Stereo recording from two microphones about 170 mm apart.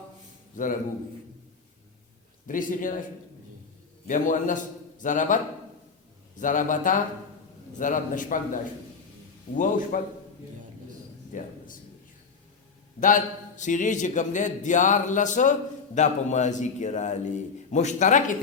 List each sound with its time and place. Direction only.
0.5 s a man's voice: 50° left (ahead or behind)
2.5 s a man's voice: 50° left (ahead or behind)
4.0 s a man's voice: 50° left (ahead or behind)
6.4 s a man's voice: 50° left (ahead or behind)
11.3 s a sound: 50° left (ahead or behind)
13.0 s a man's voice: 50° left (ahead or behind)